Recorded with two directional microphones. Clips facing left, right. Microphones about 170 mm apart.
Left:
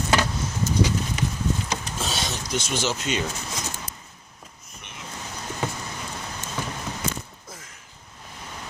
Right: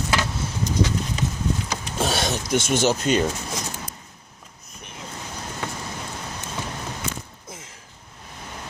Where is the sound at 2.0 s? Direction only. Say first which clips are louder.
Right 6 dB; 55° right (ahead or behind).